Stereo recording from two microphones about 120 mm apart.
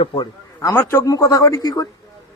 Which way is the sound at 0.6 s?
20° left (ahead or behind).